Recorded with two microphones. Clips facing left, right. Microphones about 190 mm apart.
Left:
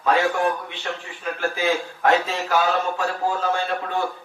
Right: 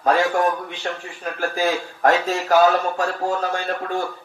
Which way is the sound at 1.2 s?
45° right (ahead or behind).